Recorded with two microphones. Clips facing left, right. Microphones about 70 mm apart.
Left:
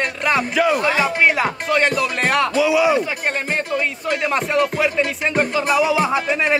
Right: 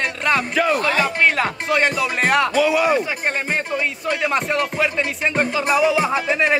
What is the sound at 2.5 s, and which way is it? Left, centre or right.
Speech, right.